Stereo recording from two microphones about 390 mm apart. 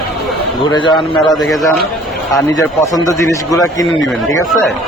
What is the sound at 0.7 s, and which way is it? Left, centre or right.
Speech, centre.